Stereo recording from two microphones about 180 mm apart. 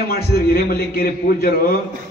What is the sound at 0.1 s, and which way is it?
A man's voice, 55° left (ahead or behind).